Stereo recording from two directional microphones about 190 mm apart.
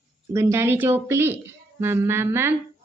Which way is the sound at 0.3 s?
15° right (ahead or behind).